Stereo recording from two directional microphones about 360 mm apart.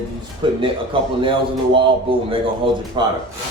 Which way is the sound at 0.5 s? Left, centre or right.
Centre.